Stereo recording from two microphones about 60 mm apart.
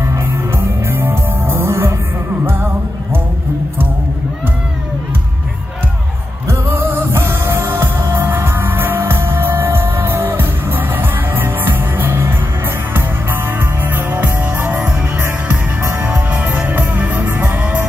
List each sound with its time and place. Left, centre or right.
0.8 s music: right
6.7 s music: right
7.1 s music: right
16.5 s music: right